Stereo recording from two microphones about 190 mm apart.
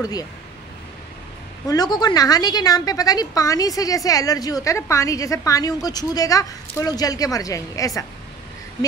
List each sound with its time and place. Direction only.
1.7 s a woman's voice: 20° left (ahead or behind)